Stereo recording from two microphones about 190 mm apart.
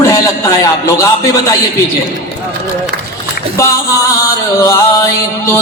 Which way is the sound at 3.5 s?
15° left (ahead or behind).